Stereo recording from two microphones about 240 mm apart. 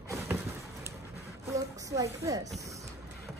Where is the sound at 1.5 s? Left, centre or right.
Centre.